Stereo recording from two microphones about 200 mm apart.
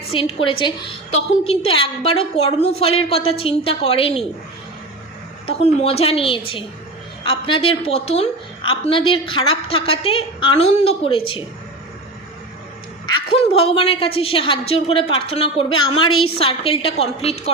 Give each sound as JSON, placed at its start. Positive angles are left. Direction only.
{"t": 0.1, "sound": "a woman's voice", "side_deg": 30}
{"t": 5.5, "sound": "a woman's voice", "side_deg": 30}
{"t": 13.1, "sound": "a woman's voice", "side_deg": 25}